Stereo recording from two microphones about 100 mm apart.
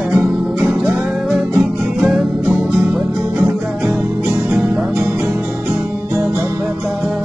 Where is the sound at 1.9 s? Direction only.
5° right (ahead or behind).